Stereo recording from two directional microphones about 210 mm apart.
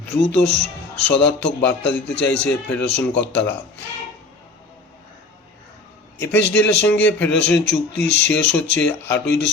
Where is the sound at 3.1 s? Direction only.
55° left (ahead or behind).